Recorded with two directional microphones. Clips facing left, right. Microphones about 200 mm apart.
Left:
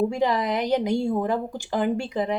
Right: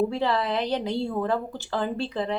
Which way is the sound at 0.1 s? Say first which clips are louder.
Left 2 dB; 15° left (ahead or behind).